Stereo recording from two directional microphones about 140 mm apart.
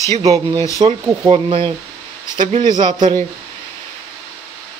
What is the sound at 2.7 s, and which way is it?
Speech, 30° right (ahead or behind).